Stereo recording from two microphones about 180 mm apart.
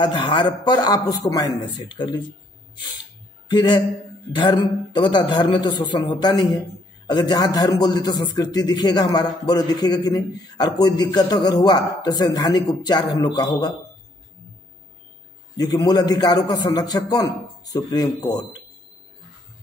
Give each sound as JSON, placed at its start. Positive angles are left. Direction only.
{"t": 0.0, "sound": "a man's voice", "side_deg": 25}
{"t": 15.5, "sound": "a man's voice", "side_deg": 20}